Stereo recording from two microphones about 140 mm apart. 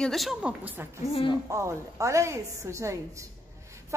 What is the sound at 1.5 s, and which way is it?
A woman's voice, 20° right (ahead or behind).